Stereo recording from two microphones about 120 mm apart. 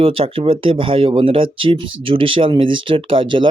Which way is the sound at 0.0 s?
50° right (ahead or behind).